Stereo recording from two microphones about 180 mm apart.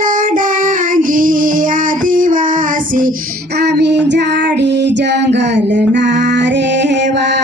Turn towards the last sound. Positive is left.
turn(degrees=-75)  # may be behind; listen again after turning